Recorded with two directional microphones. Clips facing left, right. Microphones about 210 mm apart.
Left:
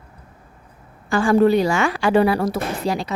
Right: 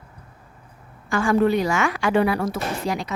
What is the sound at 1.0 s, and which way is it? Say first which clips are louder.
A woman's voice: left 4 dB; 35° left (ahead or behind).